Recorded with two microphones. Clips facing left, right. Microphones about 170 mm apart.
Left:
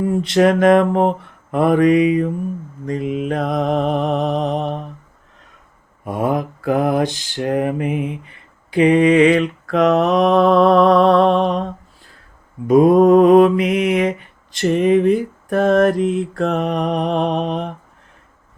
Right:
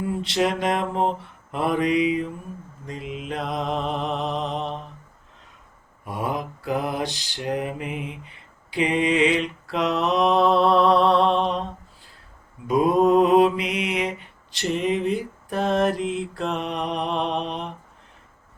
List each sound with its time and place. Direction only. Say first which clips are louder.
0.0 s mantra: left 9 dB; 50° left (ahead or behind)
6.1 s mantra: left 8 dB; 50° left (ahead or behind)